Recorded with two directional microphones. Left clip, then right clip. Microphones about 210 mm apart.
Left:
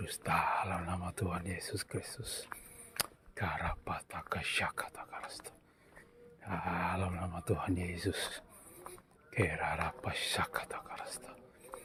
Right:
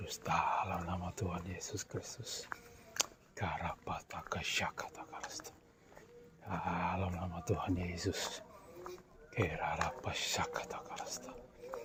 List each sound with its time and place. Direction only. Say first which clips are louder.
0.0 s speech: left 2 dB; 25° left (ahead or behind)
6.4 s speech: left 1 dB; 20° left (ahead or behind)